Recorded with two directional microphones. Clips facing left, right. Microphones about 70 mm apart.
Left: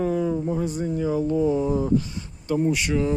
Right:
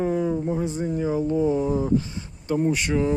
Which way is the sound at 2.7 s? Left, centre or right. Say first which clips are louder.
Even; right.